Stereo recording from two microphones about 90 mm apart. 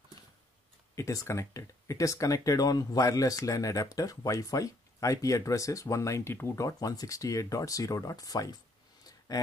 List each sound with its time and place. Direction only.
0.9 s speech: 35° left (ahead or behind)